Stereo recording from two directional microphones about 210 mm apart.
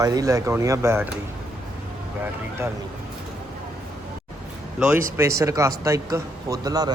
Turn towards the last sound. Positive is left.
turn(degrees=-20)  # may be behind; listen again after turning